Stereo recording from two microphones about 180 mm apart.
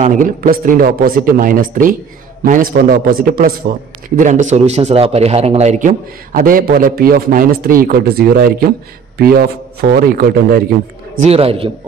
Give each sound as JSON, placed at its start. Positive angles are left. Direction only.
{"t": 0.0, "sound": "a man's voice", "side_deg": -45}
{"t": 11.1, "sound": "a man's voice", "side_deg": -35}